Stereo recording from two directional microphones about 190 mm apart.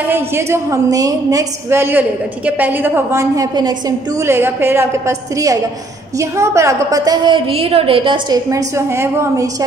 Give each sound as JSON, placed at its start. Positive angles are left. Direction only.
{"t": 0.1, "sound": "a woman's voice", "side_deg": -15}